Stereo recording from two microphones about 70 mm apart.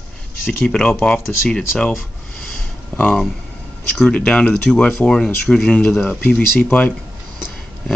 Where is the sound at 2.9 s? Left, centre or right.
Left.